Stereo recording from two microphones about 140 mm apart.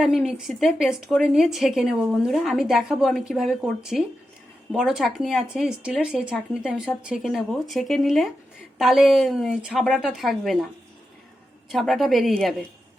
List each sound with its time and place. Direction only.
0.0 s a woman's voice: centre (ahead or behind)
11.7 s a woman's voice: centre (ahead or behind)